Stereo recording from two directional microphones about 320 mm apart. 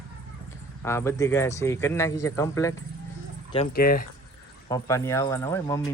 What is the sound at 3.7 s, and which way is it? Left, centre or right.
Speech, left.